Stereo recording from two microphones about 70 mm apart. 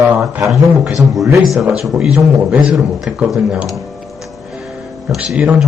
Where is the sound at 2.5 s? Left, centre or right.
Centre.